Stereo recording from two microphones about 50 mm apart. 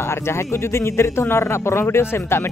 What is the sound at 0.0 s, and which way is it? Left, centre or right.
A man's voice, left.